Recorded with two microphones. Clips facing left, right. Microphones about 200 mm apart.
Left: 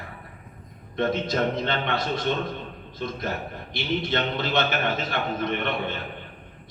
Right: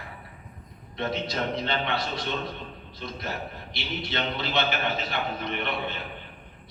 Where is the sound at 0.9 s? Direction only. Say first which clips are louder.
Left 5 dB; 50° left (ahead or behind).